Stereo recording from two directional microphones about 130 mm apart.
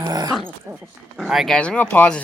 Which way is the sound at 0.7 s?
5° right (ahead or behind).